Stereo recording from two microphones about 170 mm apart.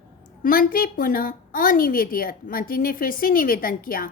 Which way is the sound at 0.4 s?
55° left (ahead or behind).